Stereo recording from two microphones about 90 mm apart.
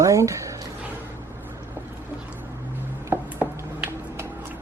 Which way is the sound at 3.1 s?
20° right (ahead or behind).